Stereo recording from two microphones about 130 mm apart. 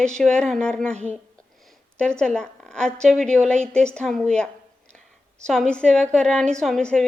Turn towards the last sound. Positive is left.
turn(degrees=5)  # may be behind; listen again after turning